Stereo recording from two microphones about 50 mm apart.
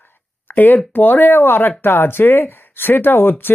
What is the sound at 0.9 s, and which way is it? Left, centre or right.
Speech, left.